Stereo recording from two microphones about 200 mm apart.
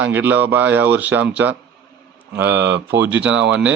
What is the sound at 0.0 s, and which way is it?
Speech, 10° right (ahead or behind).